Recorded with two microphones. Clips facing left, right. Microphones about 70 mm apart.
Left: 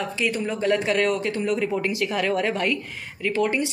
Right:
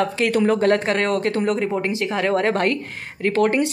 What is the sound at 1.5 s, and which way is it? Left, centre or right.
Speech, right.